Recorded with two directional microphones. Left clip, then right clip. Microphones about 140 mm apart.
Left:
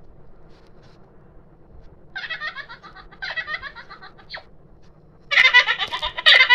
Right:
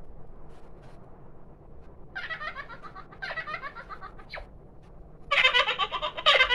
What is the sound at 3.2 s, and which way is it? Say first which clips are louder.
Giggle: left 6 dB; 5° right (ahead or behind).